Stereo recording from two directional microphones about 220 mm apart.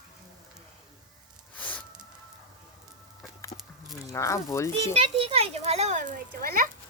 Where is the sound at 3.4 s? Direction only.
15° left (ahead or behind).